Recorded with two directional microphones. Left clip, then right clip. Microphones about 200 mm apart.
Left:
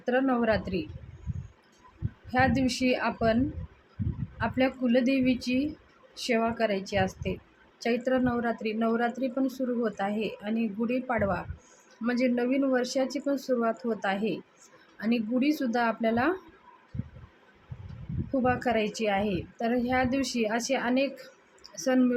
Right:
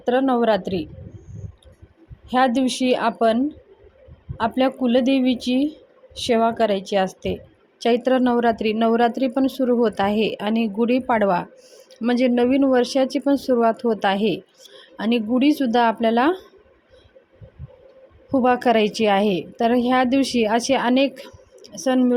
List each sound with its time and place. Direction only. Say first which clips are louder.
0.0 s a woman's voice: right 8 dB; 30° right (ahead or behind)
2.3 s a woman's voice: right 7 dB; 35° right (ahead or behind)
4.4 s a woman's voice: right 8 dB; 35° right (ahead or behind)
18.3 s a woman's voice: right 9 dB; 40° right (ahead or behind)